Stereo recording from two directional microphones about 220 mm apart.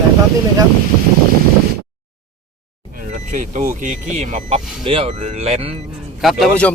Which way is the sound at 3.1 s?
35° right (ahead or behind).